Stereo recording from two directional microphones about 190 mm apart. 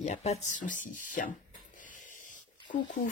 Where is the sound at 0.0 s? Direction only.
35° left (ahead or behind).